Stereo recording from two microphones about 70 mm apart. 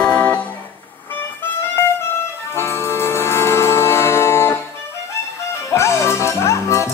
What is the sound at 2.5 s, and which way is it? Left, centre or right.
Music, left.